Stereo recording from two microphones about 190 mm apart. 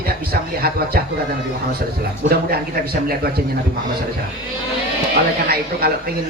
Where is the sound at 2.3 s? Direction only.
55° right (ahead or behind).